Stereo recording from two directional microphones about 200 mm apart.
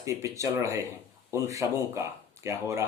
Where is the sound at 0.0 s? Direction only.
15° right (ahead or behind).